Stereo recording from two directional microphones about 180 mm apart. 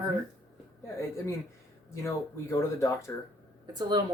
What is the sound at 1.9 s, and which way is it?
Speech, 15° left (ahead or behind).